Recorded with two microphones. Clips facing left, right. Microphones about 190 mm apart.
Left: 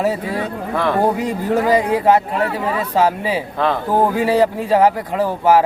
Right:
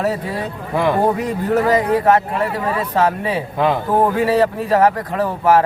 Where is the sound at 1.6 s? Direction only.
10° left (ahead or behind).